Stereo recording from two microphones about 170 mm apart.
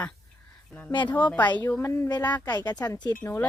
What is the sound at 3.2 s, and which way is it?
Speech, 15° left (ahead or behind).